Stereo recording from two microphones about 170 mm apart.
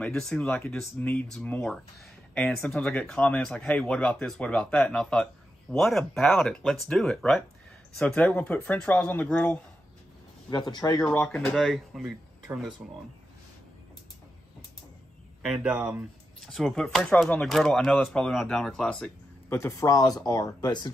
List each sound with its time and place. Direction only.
0.0 s speech: 5° left (ahead or behind)
10.5 s speech: 25° left (ahead or behind)
11.1 s speech: 5° left (ahead or behind)
15.4 s speech: 5° right (ahead or behind)
19.5 s speech: 15° left (ahead or behind)